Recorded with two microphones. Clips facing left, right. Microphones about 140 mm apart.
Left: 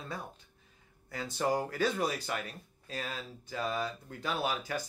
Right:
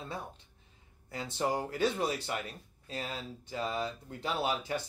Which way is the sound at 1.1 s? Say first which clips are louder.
Left 1 dB; 25° right (ahead or behind).